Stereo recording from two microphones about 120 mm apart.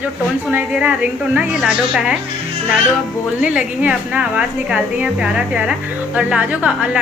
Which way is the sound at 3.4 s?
10° right (ahead or behind).